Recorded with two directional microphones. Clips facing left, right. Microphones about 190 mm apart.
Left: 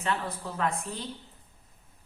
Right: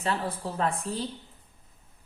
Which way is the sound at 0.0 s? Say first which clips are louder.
Right 2 dB; 35° right (ahead or behind).